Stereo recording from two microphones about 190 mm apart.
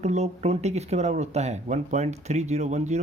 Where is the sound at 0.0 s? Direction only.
35° right (ahead or behind).